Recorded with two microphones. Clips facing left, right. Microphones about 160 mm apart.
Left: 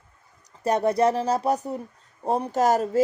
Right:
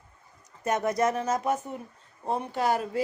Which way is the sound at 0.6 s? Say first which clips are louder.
Left 5 dB; 30° left (ahead or behind).